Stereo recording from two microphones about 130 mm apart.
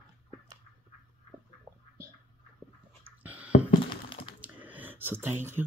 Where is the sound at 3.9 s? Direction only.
40° left (ahead or behind).